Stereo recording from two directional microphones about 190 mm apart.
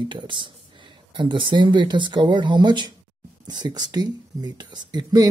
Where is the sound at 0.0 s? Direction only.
25° right (ahead or behind).